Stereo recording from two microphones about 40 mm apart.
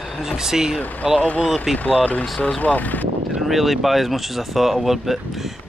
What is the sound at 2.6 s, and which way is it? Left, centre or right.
Speech, left.